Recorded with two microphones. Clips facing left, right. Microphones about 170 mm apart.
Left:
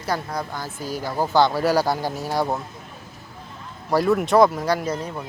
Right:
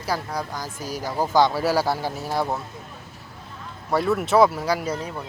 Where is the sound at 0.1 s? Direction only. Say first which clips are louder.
Left 1 dB; 10° right (ahead or behind).